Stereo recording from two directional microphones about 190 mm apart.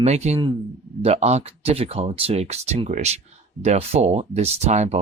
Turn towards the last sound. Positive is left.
turn(degrees=-35)  # may be behind; listen again after turning